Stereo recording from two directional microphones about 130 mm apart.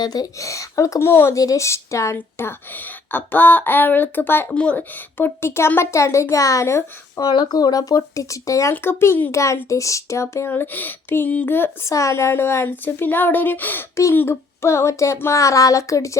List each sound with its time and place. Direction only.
0.0 s speech: 30° left (ahead or behind)
7.3 s speech: 35° left (ahead or behind)